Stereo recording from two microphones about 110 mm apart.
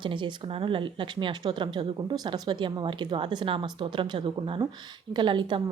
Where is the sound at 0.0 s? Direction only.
45° right (ahead or behind).